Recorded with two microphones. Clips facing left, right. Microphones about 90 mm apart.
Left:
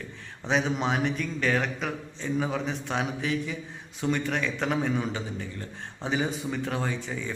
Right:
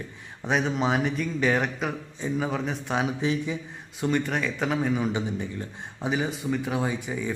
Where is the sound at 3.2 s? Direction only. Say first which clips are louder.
Right 3 dB; 20° right (ahead or behind).